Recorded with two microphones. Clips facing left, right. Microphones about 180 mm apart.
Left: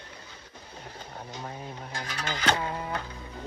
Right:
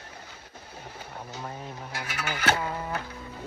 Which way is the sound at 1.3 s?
10° right (ahead or behind).